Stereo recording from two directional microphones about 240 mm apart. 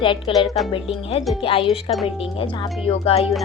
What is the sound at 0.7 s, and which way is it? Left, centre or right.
Speech, left.